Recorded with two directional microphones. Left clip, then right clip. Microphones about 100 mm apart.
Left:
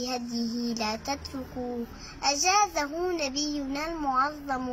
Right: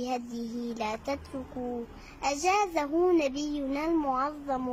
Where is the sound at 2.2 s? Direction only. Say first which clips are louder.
Left 3 dB; 30° right (ahead or behind).